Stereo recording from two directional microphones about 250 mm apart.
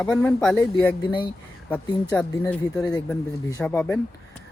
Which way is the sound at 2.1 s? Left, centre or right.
Centre.